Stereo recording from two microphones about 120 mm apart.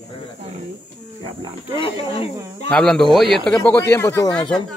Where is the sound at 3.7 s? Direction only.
20° left (ahead or behind).